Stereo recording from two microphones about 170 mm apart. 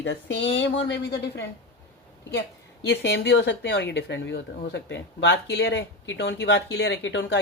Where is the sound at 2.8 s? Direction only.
85° left.